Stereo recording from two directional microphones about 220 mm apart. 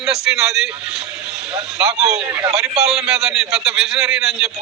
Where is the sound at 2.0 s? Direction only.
5° right (ahead or behind).